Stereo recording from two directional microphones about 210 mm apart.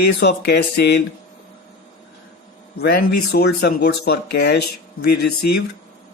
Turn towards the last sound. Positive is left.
turn(degrees=50)  # may be behind; listen again after turning